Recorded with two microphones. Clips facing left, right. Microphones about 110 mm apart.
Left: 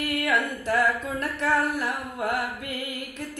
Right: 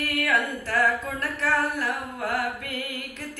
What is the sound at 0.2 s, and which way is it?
Singing, 20° left (ahead or behind).